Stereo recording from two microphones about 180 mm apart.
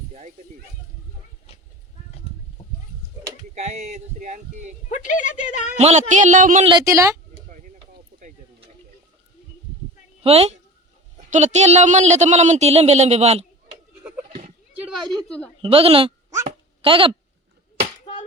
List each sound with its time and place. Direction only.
3.5 s a man's voice: 40° right (ahead or behind)
4.9 s a woman's voice: 45° left (ahead or behind)
5.7 s speech: 40° right (ahead or behind)
6.7 s a woman's voice: 20° right (ahead or behind)
10.2 s a man's voice: 35° right (ahead or behind)
15.1 s speech: 5° left (ahead or behind)
15.6 s a man's voice: 30° right (ahead or behind)